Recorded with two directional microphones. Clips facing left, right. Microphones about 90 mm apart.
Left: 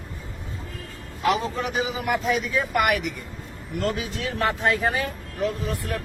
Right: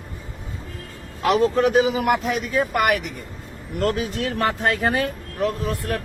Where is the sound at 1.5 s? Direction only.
60° right (ahead or behind).